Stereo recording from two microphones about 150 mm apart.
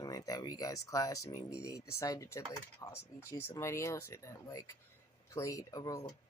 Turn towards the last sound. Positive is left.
turn(degrees=25)  # may be behind; listen again after turning